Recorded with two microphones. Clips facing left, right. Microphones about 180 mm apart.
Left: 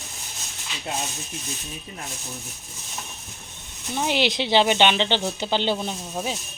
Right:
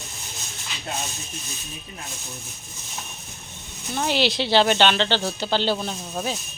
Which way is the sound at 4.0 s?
15° left (ahead or behind).